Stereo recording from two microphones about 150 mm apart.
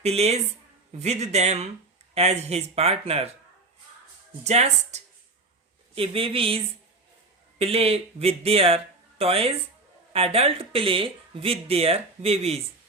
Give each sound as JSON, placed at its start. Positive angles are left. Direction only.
{"t": 0.0, "sound": "speech", "side_deg": -45}
{"t": 4.4, "sound": "speech", "side_deg": -50}
{"t": 7.6, "sound": "speech", "side_deg": -40}